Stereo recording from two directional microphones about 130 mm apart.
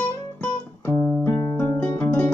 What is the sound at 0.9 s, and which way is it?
Music, 20° left (ahead or behind).